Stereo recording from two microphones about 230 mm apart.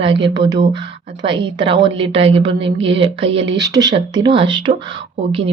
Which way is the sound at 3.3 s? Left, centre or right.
Right.